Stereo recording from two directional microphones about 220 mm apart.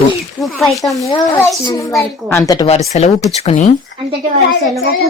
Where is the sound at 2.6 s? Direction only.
30° left (ahead or behind).